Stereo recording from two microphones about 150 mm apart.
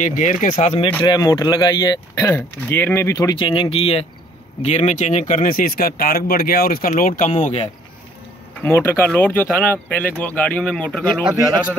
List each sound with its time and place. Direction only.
0.0 s speech: 55° left (ahead or behind)
1.0 s speech: 25° left (ahead or behind); by 7.7 s 50° left (ahead or behind)
8.6 s speech: 10° left (ahead or behind)
11.2 s a man's voice: 30° right (ahead or behind)